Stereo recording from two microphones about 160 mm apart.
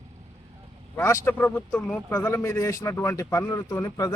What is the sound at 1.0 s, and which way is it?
A man's voice, 15° left (ahead or behind).